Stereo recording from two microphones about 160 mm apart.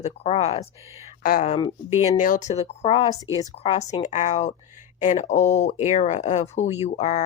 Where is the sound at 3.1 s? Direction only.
20° left (ahead or behind).